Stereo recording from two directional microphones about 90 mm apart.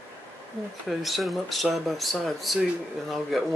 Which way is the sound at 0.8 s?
Centre (ahead or behind).